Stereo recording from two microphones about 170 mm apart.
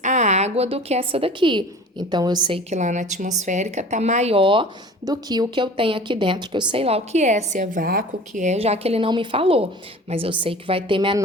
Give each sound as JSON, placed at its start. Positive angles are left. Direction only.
{"t": 0.0, "sound": "a woman's voice", "side_deg": -45}
{"t": 2.6, "sound": "a woman's voice", "side_deg": -45}